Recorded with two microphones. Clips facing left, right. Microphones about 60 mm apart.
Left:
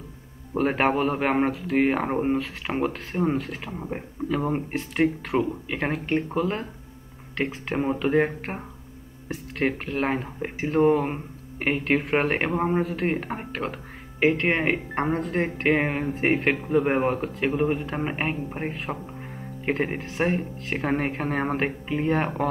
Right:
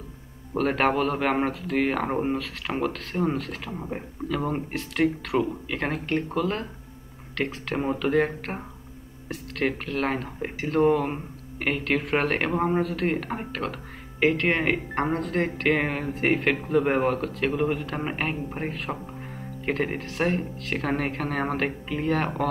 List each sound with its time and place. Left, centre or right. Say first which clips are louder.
0.6 s speech: left 1 dB; left
2.0 s speech: left 2 dB; centre
2.3 s speech: left 2 dB; left
3.7 s speech: even; centre
4.3 s speech: left 2 dB; left
8.5 s speech: even; centre
9.6 s speech: left 1 dB; left
10.0 s speech: left 2 dB; centre
12.5 s speech: right 1 dB; centre
12.9 s speech: even; left
18.3 s speech: left 1 dB; centre
19.2 s music: even; centre
19.7 s speech: left 1 dB; left